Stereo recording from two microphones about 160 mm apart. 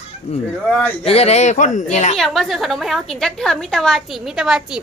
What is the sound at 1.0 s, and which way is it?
A woman's voice, 40° left (ahead or behind).